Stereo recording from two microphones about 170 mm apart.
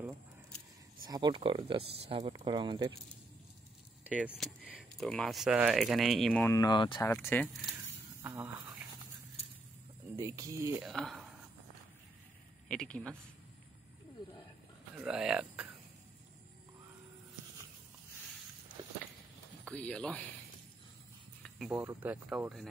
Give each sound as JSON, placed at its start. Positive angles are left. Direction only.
{"t": 1.0, "sound": "speech", "side_deg": -25}
{"t": 4.0, "sound": "keys jangling", "side_deg": -10}
{"t": 4.6, "sound": "speech", "side_deg": 0}
{"t": 6.4, "sound": "speech", "side_deg": 20}
{"t": 7.1, "sound": "speech", "side_deg": 10}
{"t": 8.2, "sound": "a sound", "side_deg": -15}
{"t": 10.1, "sound": "speech", "side_deg": -20}
{"t": 10.8, "sound": "speech", "side_deg": 0}
{"t": 12.6, "sound": "speech", "side_deg": 5}
{"t": 15.0, "sound": "speech", "side_deg": -5}
{"t": 18.8, "sound": "a sound", "side_deg": -30}
{"t": 19.6, "sound": "speech", "side_deg": 5}
{"t": 21.4, "sound": "speech", "side_deg": -5}